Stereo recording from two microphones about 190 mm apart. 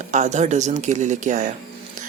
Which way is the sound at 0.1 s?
40° right (ahead or behind).